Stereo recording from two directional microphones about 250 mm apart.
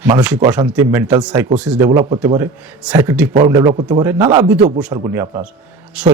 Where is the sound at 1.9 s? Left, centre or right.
Centre.